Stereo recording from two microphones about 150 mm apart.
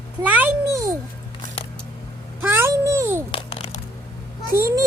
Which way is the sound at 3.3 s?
40° left (ahead or behind).